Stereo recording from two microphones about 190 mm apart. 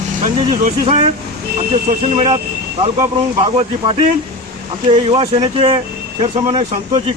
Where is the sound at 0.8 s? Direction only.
25° right (ahead or behind).